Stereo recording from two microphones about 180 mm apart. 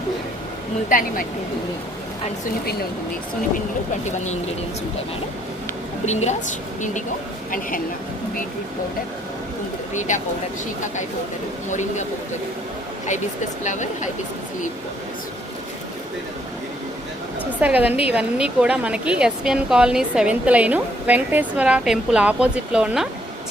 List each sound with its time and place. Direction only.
0.9 s speech: 50° left (ahead or behind)
6.1 s a woman's voice: 40° left (ahead or behind)
10.1 s speech: 45° left (ahead or behind)
11.7 s speech: 40° left (ahead or behind)
13.7 s speech: 40° left (ahead or behind)
17.6 s a woman's voice: 10° right (ahead or behind)